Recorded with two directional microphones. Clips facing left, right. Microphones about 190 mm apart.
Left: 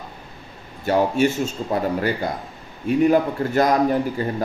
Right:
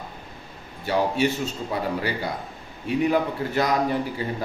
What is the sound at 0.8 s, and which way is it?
A man's voice, 45° left (ahead or behind).